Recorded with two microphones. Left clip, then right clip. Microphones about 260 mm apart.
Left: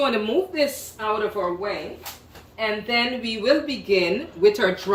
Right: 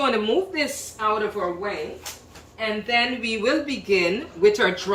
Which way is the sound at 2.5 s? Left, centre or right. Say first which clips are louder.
Even; centre.